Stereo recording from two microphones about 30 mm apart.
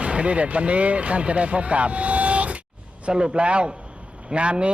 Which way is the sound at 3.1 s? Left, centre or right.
Right.